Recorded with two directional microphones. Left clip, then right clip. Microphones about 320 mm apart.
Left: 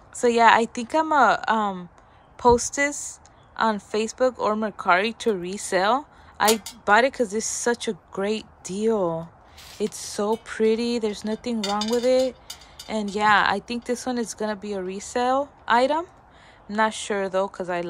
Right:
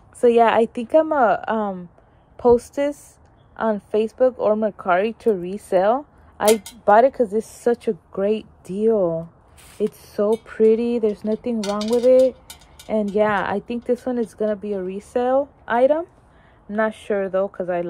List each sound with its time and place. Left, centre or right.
0.2 s speech: centre